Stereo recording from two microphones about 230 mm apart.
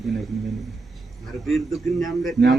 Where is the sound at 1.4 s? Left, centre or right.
Centre.